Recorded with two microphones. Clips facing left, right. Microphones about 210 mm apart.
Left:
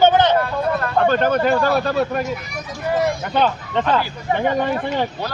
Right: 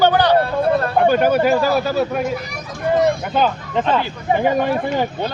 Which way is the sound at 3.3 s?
5° right (ahead or behind).